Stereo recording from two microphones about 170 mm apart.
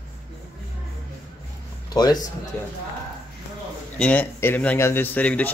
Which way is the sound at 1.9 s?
25° left (ahead or behind).